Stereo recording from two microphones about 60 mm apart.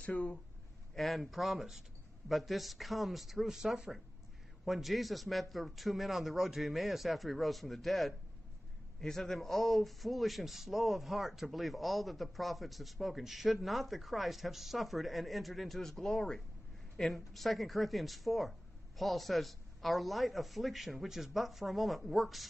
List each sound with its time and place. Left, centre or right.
0.0 s speech: left
0.9 s a man's voice: centre